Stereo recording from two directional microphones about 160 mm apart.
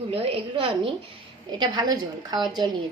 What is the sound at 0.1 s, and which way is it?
A woman's voice, 40° right (ahead or behind).